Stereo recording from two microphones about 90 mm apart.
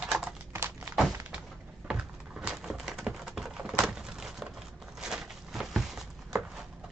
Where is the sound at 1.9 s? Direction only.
10° right (ahead or behind).